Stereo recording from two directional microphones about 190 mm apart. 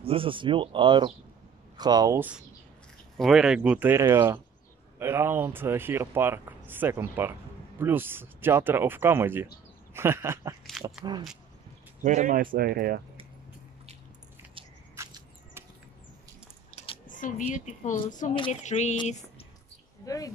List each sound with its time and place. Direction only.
0.0 s speech: 30° right (ahead or behind); by 10.5 s 15° right (ahead or behind)
10.7 s speech: centre (ahead or behind)
12.0 s speech: 45° right (ahead or behind)
15.0 s a sound: 15° right (ahead or behind)
16.7 s a sound: 30° left (ahead or behind)
17.0 s speech: 45° left (ahead or behind)
20.0 s speech: 20° left (ahead or behind)